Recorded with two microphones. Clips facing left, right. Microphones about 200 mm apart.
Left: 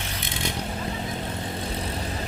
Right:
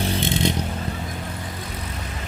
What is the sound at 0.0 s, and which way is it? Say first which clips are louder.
Vehicle: right 10 dB; 30° right (ahead or behind).